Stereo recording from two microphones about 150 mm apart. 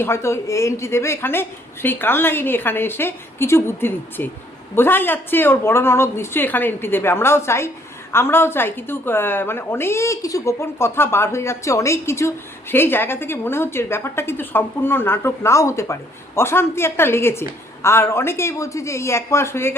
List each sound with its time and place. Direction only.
0.0 s a woman's voice: 20° left (ahead or behind)